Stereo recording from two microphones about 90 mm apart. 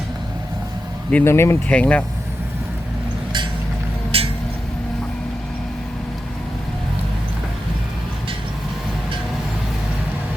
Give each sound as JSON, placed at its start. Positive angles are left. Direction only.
{"t": 1.2, "sound": "speech", "side_deg": 30}
{"t": 1.6, "sound": "speech", "side_deg": 15}
{"t": 4.1, "sound": "a sound", "side_deg": -90}